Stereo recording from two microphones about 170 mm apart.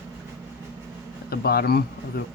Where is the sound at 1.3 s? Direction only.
65° left (ahead or behind).